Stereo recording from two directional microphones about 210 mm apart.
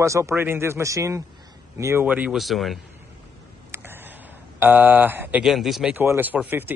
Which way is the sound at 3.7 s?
10° right (ahead or behind).